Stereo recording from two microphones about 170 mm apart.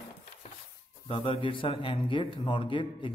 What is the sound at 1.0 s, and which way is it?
A man's voice, 30° left (ahead or behind).